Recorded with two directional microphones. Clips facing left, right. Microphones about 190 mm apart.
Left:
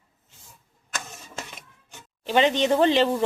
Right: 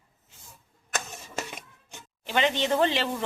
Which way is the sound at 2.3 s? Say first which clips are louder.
Left 5 dB; 20° left (ahead or behind).